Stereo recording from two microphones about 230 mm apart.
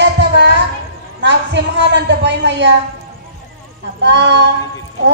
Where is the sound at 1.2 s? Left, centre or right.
Right.